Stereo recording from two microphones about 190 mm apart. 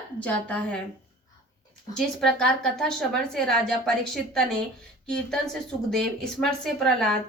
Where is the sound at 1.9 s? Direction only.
5° left (ahead or behind).